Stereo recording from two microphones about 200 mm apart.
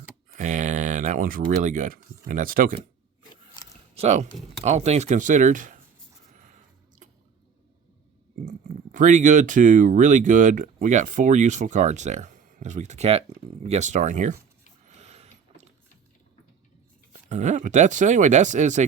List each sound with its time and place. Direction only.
0.3 s speech: 40° right (ahead or behind)
3.6 s a sound: 20° left (ahead or behind)
3.9 s speech: 35° right (ahead or behind)
7.0 s squish: 40° right (ahead or behind)
8.4 s speech: 40° right (ahead or behind)
14.8 s a sound: 35° right (ahead or behind)
17.1 s speech: 35° right (ahead or behind)